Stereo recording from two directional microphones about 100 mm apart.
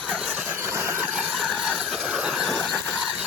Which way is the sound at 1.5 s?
5° left (ahead or behind).